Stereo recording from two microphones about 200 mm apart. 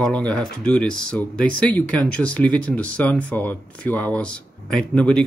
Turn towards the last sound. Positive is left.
turn(degrees=5)  # may be behind; listen again after turning